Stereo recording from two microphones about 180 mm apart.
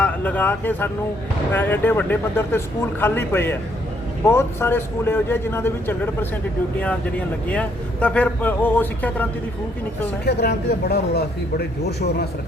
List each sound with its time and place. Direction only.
0.0 s speech: 10° left (ahead or behind)
7.4 s speech: 5° left (ahead or behind)
10.2 s speech: 65° left (ahead or behind)